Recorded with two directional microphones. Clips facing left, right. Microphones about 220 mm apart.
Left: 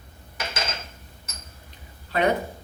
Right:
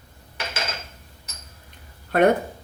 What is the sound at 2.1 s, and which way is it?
Speech, 50° right (ahead or behind).